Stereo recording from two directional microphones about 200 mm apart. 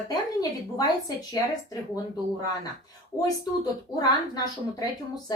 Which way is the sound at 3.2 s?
20° left (ahead or behind).